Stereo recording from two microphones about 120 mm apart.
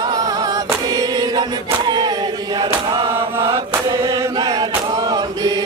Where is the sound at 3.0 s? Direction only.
50° right (ahead or behind).